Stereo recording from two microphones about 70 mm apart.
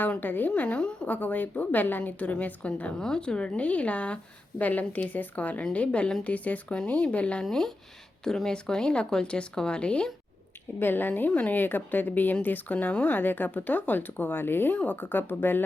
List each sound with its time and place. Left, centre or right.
0.1 s a woman's voice: left
1.1 s a woman's voice: left
7.4 s speech: centre
10.8 s a woman's voice: left